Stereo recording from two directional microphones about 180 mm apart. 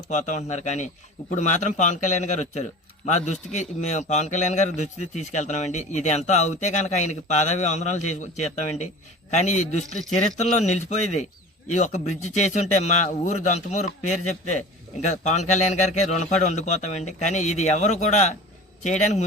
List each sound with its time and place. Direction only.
0.1 s a man's voice: 40° left (ahead or behind)